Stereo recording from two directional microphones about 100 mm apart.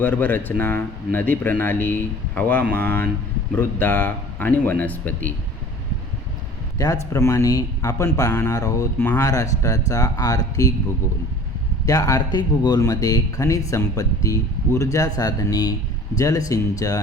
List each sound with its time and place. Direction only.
0.0 s speech: 20° left (ahead or behind)
6.7 s speech: 35° left (ahead or behind)
11.9 s speech: 35° left (ahead or behind)